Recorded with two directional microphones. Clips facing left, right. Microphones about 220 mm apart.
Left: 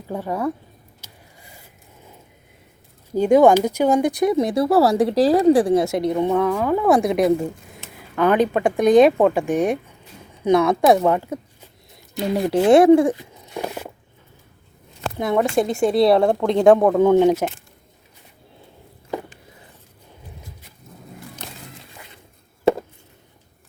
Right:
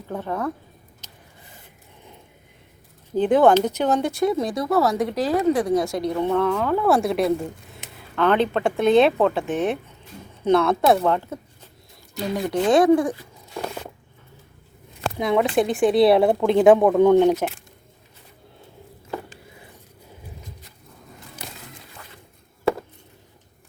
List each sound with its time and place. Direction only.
0.1 s speech: 10° left (ahead or behind)
1.0 s a sound: 10° left (ahead or behind)
3.2 s speech: 10° left (ahead or behind)
12.3 s speech: 30° left (ahead or behind)
13.7 s a sound: 5° left (ahead or behind)
15.2 s speech: centre (ahead or behind)